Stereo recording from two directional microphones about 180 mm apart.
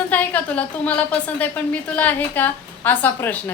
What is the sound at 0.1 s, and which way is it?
A woman's voice, 10° left (ahead or behind).